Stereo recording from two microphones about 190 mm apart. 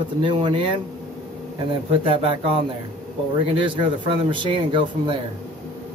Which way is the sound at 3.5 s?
25° right (ahead or behind).